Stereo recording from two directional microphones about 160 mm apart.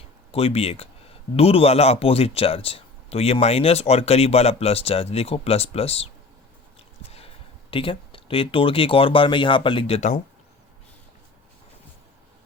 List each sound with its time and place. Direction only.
0.3 s speech: 40° left (ahead or behind)
7.1 s speech: 35° left (ahead or behind)